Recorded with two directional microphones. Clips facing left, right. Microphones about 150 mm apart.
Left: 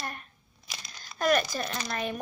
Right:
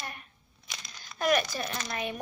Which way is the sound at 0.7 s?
10° left (ahead or behind).